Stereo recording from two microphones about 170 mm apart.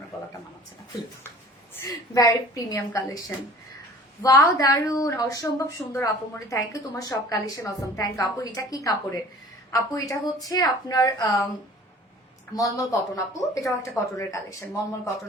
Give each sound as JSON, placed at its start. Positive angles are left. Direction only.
{"t": 1.7, "sound": "a woman's voice", "side_deg": 20}
{"t": 12.5, "sound": "a woman's voice", "side_deg": 20}